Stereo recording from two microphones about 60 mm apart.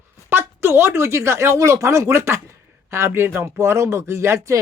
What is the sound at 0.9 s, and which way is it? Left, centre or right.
Speech, right.